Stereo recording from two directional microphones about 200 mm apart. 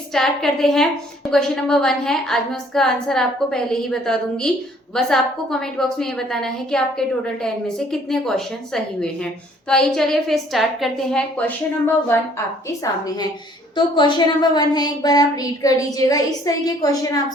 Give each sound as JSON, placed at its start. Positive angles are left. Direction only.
{"t": 0.1, "sound": "a woman's voice", "side_deg": 0}
{"t": 12.6, "sound": "a woman's voice", "side_deg": 15}